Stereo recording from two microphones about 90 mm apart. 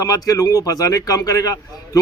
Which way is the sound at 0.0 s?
40° left (ahead or behind).